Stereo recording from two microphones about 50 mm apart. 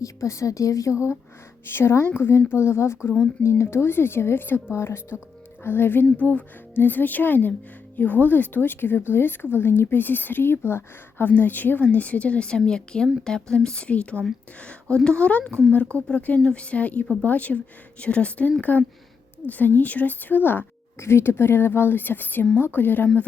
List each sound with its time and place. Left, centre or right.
0.0 s a woman's voice: left
1.6 s a woman's voice: left
11.3 s a woman's voice: left
21.0 s a woman's voice: left